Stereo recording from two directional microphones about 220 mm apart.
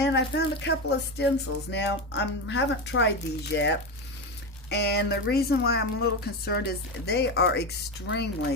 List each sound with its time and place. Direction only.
0.0 s speech: 50° left (ahead or behind)
4.7 s speech: 50° left (ahead or behind)